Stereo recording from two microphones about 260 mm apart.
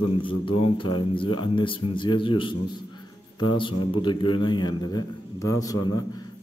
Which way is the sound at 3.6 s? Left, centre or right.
Centre.